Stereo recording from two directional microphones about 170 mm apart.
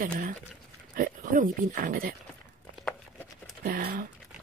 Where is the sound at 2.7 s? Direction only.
5° left (ahead or behind).